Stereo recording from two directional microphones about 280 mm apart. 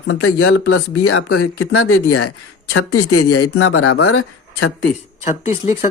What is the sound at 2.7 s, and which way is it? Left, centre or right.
Speech, left.